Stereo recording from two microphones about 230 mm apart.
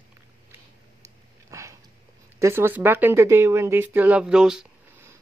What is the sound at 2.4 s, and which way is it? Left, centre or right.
Speech, centre.